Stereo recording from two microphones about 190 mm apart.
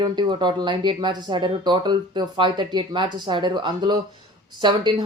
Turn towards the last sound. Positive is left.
turn(degrees=-25)  # may be behind; listen again after turning